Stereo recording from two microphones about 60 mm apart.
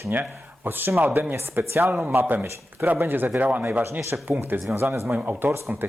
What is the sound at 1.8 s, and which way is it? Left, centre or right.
Speech, right.